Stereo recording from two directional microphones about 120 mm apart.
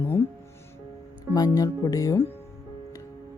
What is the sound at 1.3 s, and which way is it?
Speech, 30° left (ahead or behind).